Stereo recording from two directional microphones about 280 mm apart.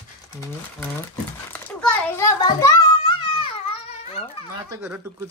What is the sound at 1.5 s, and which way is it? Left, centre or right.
Children playing, centre.